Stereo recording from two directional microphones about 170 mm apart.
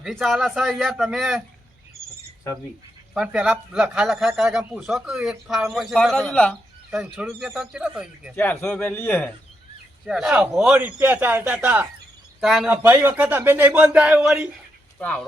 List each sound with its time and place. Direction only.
0.0 s speech: centre (ahead or behind)
3.2 s speech: 5° right (ahead or behind)
6.9 s speech: 5° right (ahead or behind)
8.4 s a man's voice: 10° left (ahead or behind)
10.1 s speech: 5° right (ahead or behind)
14.9 s speech: 5° left (ahead or behind)